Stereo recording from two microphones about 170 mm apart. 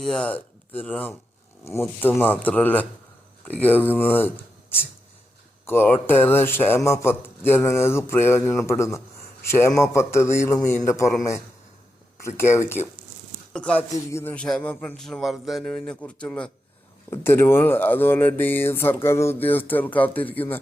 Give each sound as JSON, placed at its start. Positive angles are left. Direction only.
{"t": 0.0, "sound": "speech", "side_deg": 5}
{"t": 5.6, "sound": "speech", "side_deg": 15}
{"t": 12.4, "sound": "speech", "side_deg": 15}
{"t": 13.9, "sound": "a sound", "side_deg": 15}
{"t": 17.1, "sound": "speech", "side_deg": 15}